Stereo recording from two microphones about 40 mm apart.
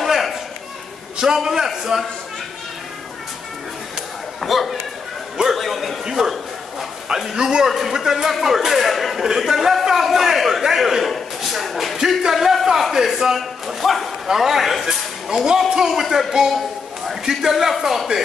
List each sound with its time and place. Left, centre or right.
0.0 s a sound: centre
1.1 s speech: centre
4.4 s speech: centre
5.6 s a sound: centre
6.0 s a man's voice: centre
15.9 s a man's voice: centre